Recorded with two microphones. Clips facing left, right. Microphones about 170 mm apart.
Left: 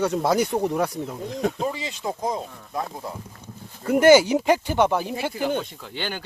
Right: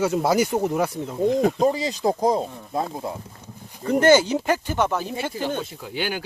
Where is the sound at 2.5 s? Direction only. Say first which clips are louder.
Right 4 dB; 25° right (ahead or behind).